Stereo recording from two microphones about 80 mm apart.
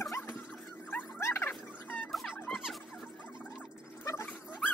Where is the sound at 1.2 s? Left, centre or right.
Left.